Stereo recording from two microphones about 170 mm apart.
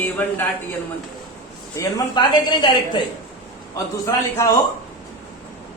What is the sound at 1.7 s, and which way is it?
A woman's voice, 20° left (ahead or behind).